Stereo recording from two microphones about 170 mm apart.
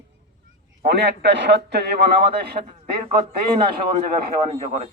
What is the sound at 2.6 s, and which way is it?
Speech, 40° right (ahead or behind).